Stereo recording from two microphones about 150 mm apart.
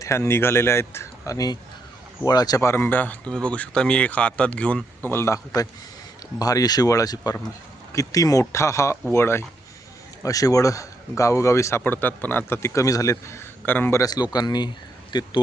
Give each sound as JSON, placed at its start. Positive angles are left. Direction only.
{"t": 0.0, "sound": "speech", "side_deg": 20}
{"t": 14.0, "sound": "speech", "side_deg": 25}